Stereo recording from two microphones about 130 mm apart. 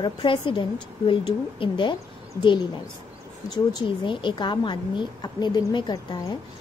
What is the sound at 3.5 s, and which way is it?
A woman's voice, 35° left (ahead or behind).